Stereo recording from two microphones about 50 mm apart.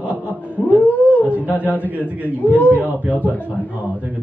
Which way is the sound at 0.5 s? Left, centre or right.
Left.